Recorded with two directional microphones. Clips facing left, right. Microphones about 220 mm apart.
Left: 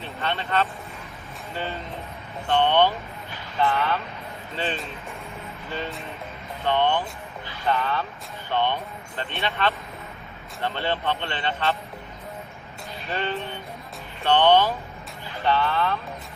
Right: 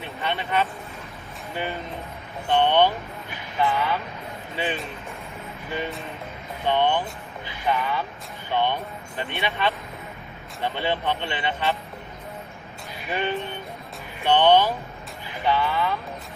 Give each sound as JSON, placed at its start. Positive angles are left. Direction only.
{"t": 0.0, "sound": "speech", "side_deg": -15}
{"t": 6.7, "sound": "speech", "side_deg": -15}
{"t": 13.0, "sound": "a sound", "side_deg": -15}
{"t": 14.3, "sound": "speech", "side_deg": -15}